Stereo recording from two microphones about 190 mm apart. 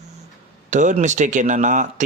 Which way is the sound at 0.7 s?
40° right (ahead or behind).